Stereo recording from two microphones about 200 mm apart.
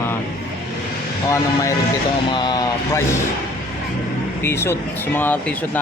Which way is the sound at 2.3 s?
20° left (ahead or behind).